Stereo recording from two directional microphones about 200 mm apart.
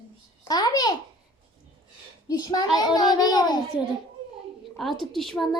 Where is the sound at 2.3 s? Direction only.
20° left (ahead or behind).